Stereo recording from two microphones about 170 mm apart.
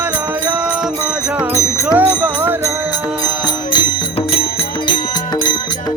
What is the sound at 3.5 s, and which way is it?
Music, 25° left (ahead or behind).